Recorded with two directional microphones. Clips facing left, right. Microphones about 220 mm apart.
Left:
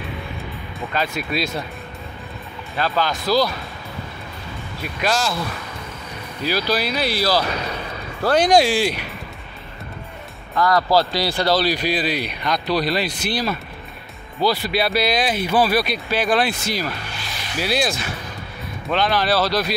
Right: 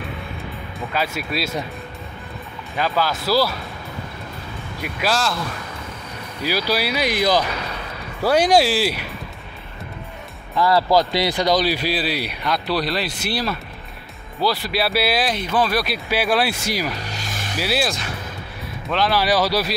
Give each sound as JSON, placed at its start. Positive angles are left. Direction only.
{"t": 0.7, "sound": "speech", "side_deg": -5}
{"t": 2.9, "sound": "speech", "side_deg": -5}
{"t": 4.8, "sound": "speech", "side_deg": 0}
{"t": 6.4, "sound": "speech", "side_deg": -10}
{"t": 11.1, "sound": "speech", "side_deg": -20}
{"t": 15.3, "sound": "speech", "side_deg": 10}
{"t": 17.0, "sound": "music", "side_deg": -40}
{"t": 17.6, "sound": "speech", "side_deg": -5}